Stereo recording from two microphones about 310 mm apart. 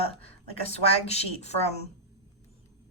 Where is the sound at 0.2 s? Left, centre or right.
Centre.